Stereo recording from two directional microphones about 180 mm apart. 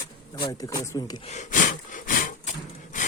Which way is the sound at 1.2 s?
40° left (ahead or behind).